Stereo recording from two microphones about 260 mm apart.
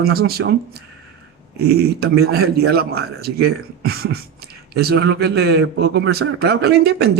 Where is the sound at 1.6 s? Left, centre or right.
Right.